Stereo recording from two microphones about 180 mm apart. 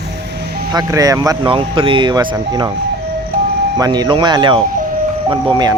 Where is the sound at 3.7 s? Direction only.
20° right (ahead or behind).